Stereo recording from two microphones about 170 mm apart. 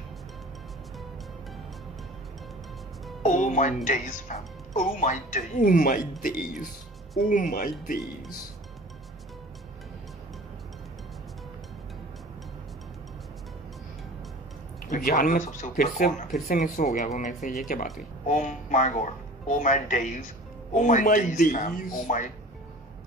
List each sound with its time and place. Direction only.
3.2 s speech: 45° left (ahead or behind)
7.2 s speech: 50° left (ahead or behind)
14.9 s speech: 55° left (ahead or behind)